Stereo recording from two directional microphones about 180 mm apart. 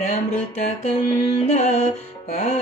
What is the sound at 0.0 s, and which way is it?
Mantra, 40° left (ahead or behind).